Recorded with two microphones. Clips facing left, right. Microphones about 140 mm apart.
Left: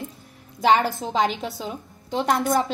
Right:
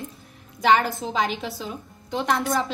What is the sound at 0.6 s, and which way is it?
A woman's voice, 25° left (ahead or behind).